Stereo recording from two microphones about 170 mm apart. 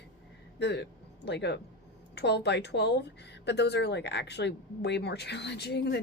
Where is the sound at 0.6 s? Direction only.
90° left.